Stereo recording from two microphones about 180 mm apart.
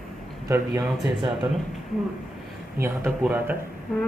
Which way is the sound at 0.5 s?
15° right (ahead or behind).